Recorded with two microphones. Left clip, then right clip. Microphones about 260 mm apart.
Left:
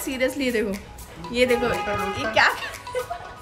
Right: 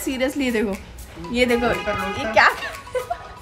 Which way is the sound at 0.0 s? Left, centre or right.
Centre.